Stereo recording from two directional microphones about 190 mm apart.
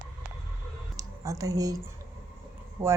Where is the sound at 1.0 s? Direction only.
15° right (ahead or behind).